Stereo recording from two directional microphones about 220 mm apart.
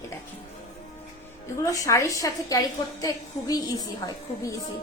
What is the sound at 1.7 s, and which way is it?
A woman's voice, 15° left (ahead or behind).